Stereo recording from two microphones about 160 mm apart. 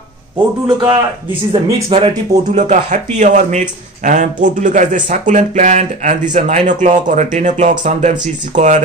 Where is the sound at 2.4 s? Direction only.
50° right (ahead or behind).